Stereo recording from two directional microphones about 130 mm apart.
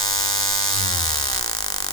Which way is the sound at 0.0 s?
30° left (ahead or behind).